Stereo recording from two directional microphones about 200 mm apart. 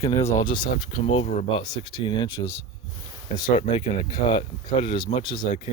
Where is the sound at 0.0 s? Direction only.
15° left (ahead or behind); by 2.5 s 30° left (ahead or behind).